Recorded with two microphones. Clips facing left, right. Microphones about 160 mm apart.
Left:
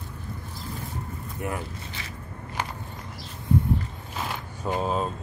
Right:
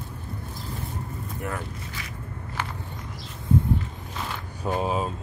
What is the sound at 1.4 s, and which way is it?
Vehicle, 15° left (ahead or behind).